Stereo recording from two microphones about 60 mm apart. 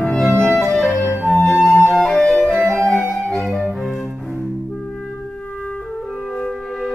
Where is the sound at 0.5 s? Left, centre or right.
Centre.